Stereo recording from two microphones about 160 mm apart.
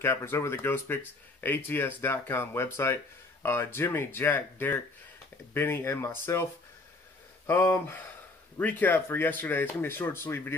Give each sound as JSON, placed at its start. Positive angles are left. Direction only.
{"t": 0.0, "sound": "speech", "side_deg": 15}
{"t": 7.4, "sound": "speech", "side_deg": 15}